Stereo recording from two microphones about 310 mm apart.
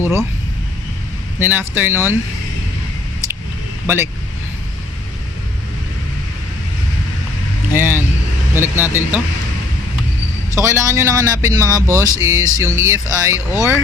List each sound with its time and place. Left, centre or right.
0.0 s speech: centre
1.4 s speech: centre
3.8 s speech: centre
7.7 s speech: centre
10.5 s speech: centre